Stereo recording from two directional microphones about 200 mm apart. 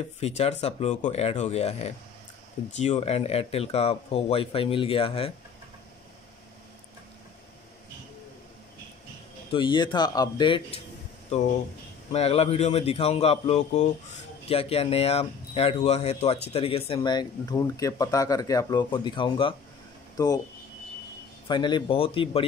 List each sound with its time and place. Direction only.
0.2 s a man's voice: 30° left (ahead or behind)
9.5 s speech: 25° left (ahead or behind)
12.1 s a man's voice: 30° left (ahead or behind)
21.5 s speech: 25° left (ahead or behind)